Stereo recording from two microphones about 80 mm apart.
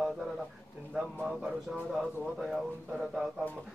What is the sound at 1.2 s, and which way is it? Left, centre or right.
Speech, centre.